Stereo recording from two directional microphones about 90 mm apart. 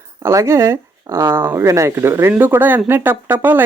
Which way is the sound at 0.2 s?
30° right (ahead or behind).